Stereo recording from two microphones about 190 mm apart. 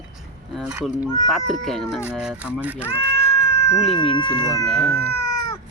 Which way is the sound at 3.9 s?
25° left (ahead or behind).